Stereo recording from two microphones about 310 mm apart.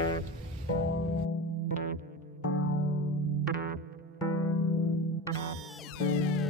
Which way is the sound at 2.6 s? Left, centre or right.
Left.